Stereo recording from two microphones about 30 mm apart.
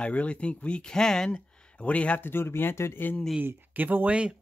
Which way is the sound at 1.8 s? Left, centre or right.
Left.